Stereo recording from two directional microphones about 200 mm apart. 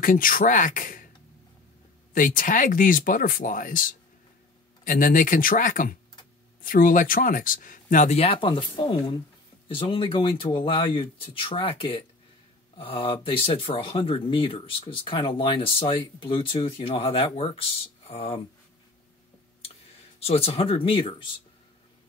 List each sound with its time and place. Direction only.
0.0 s speech: 45° left (ahead or behind)
2.1 s speech: 45° left (ahead or behind)
20.2 s speech: 30° left (ahead or behind)